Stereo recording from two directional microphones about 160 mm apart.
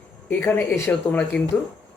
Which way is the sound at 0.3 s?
10° left (ahead or behind).